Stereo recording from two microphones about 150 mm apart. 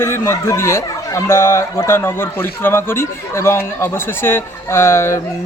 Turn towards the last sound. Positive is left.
turn(degrees=15)  # may be behind; listen again after turning